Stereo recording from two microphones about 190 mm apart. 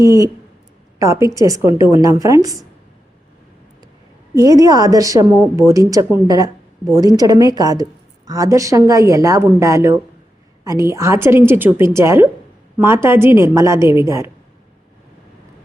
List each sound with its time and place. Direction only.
0.0 s a woman's voice: 15° right (ahead or behind)
4.4 s a woman's voice: 20° right (ahead or behind)